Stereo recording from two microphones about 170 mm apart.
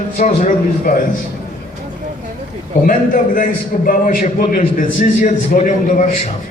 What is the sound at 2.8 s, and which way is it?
A man's voice, 50° left (ahead or behind).